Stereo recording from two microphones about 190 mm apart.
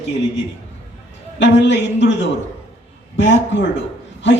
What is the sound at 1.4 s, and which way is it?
A man's voice, 70° left (ahead or behind).